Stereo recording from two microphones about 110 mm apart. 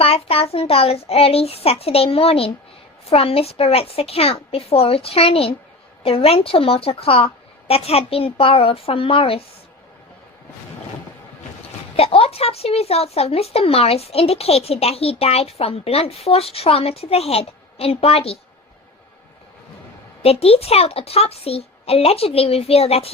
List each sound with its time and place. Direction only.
0.0 s speech: 60° left (ahead or behind)
11.9 s speech: 65° left (ahead or behind)
20.2 s speech: 65° left (ahead or behind)